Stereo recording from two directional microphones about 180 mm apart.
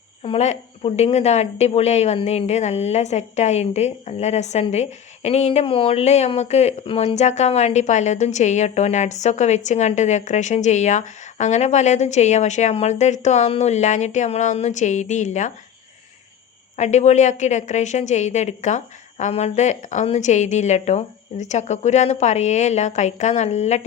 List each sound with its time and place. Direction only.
0.2 s a woman's voice: 35° left (ahead or behind)
16.7 s a woman's voice: 40° left (ahead or behind)